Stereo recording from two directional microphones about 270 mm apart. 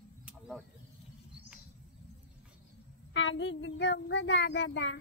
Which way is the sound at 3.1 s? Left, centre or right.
Left.